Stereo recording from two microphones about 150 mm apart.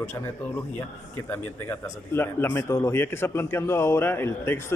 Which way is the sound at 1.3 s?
15° left (ahead or behind).